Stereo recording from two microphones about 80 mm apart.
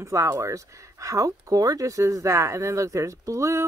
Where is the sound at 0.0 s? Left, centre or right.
Right.